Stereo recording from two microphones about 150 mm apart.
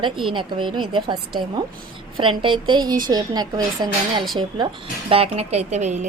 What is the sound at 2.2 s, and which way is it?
A woman's voice, 35° right (ahead or behind).